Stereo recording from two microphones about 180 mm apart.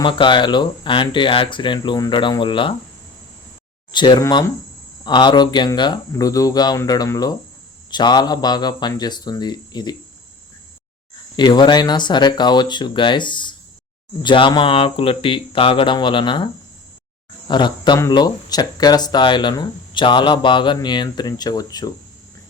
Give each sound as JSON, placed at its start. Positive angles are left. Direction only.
{"t": 0.0, "sound": "speech", "side_deg": 25}
{"t": 3.9, "sound": "speech", "side_deg": 25}
{"t": 11.3, "sound": "speech", "side_deg": 25}
{"t": 17.5, "sound": "speech", "side_deg": 25}